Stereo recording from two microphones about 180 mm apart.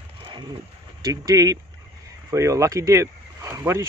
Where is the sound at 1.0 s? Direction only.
20° right (ahead or behind).